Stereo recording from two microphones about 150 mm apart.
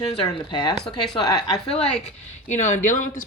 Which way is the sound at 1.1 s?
30° left (ahead or behind).